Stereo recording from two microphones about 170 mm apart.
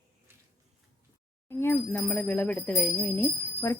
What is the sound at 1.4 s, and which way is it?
Speech, 15° left (ahead or behind).